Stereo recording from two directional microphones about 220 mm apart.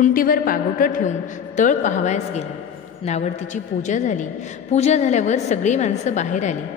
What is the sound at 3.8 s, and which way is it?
A woman's voice, 35° left (ahead or behind).